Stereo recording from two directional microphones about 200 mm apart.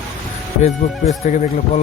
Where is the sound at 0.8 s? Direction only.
35° left (ahead or behind).